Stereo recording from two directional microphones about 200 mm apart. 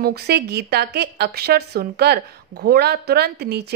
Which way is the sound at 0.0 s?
50° right (ahead or behind).